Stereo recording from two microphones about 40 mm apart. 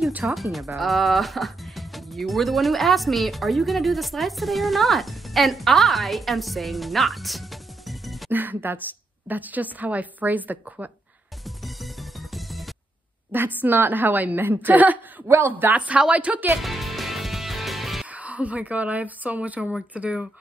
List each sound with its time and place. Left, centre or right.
0.2 s speech: centre
8.3 s a woman's voice: right
11.4 s music: centre
13.3 s a woman's voice: right
15.3 s speech: right
16.1 s speech: right
16.6 s music: centre
18.1 s speech: right
19.9 s speech: right